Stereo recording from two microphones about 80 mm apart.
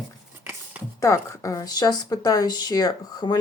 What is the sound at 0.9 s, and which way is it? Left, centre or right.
A woman's voice, left.